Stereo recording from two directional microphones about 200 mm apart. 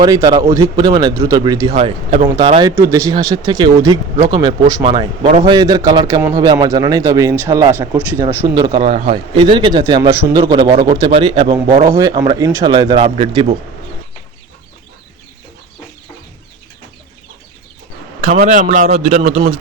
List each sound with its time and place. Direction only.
0.0 s a man's voice: 20° right (ahead or behind)
1.7 s a man's voice: 30° right (ahead or behind)
18.2 s a man's voice: 40° right (ahead or behind)